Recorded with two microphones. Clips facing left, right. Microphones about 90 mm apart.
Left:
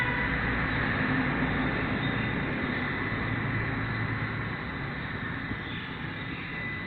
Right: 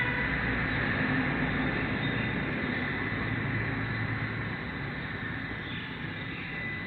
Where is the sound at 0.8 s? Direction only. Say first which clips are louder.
Left 1 dB; 20° left (ahead or behind).